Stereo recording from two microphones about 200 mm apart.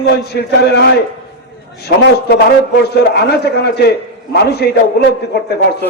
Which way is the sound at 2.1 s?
55° left (ahead or behind).